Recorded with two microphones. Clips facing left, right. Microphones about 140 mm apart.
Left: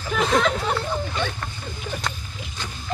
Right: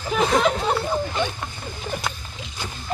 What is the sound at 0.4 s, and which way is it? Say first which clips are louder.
Speech: right 2 dB; 20° right (ahead or behind).